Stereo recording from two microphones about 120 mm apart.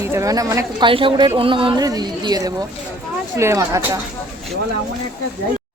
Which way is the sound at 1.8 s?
35° right (ahead or behind).